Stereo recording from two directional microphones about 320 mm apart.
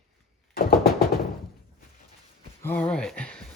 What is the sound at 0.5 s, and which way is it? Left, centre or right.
Music, left.